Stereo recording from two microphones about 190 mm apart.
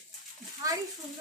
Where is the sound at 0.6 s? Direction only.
20° right (ahead or behind).